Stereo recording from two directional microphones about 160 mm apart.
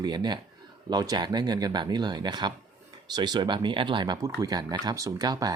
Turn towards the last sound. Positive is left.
turn(degrees=-25)  # may be behind; listen again after turning